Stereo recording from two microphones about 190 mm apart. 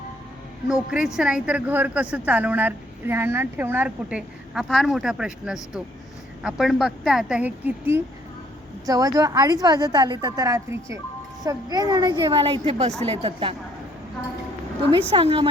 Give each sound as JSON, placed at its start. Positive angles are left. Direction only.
{"t": 0.7, "sound": "a woman's voice", "side_deg": -5}
{"t": 15.1, "sound": "a woman's voice", "side_deg": -30}